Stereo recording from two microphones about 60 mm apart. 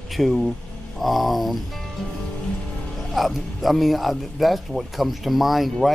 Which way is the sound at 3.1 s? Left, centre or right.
Centre.